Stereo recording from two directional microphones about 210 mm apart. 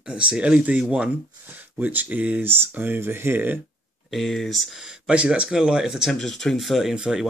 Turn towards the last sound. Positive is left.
turn(degrees=-5)  # may be behind; listen again after turning